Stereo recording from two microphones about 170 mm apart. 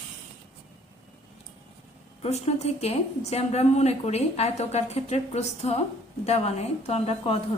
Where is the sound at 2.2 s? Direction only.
40° left (ahead or behind).